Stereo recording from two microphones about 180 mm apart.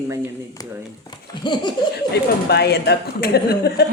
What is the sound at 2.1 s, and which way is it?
Speech, 65° left (ahead or behind).